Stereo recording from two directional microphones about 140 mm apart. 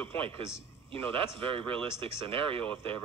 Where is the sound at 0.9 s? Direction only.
40° right (ahead or behind).